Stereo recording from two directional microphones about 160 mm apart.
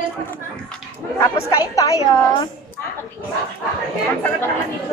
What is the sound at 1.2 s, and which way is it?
A woman's voice, 20° left (ahead or behind).